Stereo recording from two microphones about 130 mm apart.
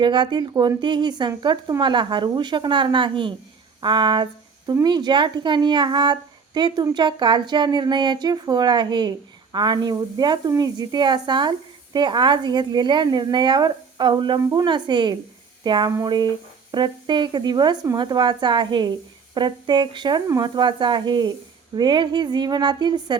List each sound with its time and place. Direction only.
0.0 s speech: 35° right (ahead or behind)